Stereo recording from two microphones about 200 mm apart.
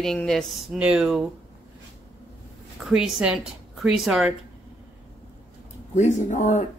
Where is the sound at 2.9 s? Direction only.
5° right (ahead or behind).